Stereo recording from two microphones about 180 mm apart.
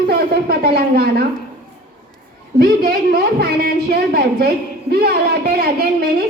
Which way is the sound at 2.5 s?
60° right (ahead or behind).